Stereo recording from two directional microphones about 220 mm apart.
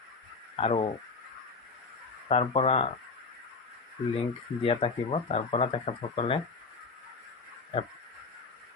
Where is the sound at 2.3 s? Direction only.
25° left (ahead or behind).